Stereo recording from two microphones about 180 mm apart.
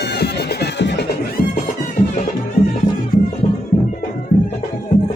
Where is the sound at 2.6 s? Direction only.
60° left (ahead or behind).